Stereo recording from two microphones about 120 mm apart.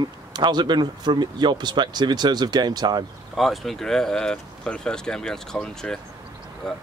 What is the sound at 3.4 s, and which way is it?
Speech, centre (ahead or behind).